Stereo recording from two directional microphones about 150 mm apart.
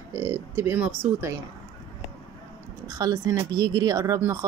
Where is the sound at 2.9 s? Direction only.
25° right (ahead or behind).